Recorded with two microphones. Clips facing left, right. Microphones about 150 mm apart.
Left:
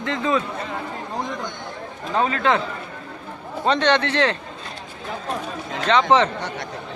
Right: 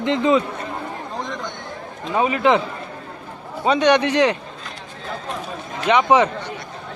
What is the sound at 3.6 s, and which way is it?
Speech, 10° right (ahead or behind).